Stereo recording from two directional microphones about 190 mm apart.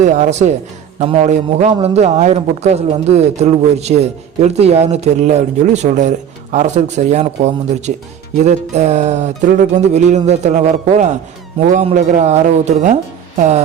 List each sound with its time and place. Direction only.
0.0 s a man's voice: 40° right (ahead or behind)